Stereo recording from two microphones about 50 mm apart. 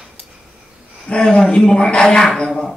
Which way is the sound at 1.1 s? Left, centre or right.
Centre.